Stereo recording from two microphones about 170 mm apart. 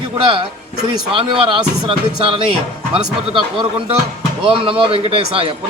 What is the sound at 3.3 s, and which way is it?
Speech, 30° right (ahead or behind).